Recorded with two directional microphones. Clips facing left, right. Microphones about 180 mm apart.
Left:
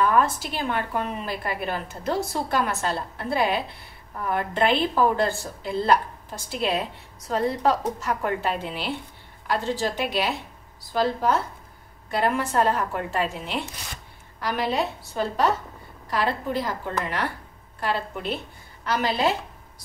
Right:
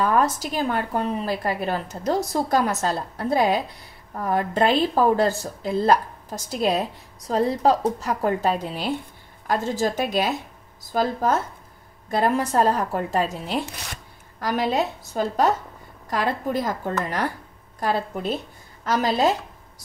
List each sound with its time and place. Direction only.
0.0 s a woman's voice: 40° right (ahead or behind)